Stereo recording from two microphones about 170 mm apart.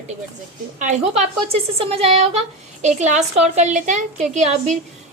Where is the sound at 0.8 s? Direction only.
45° right (ahead or behind).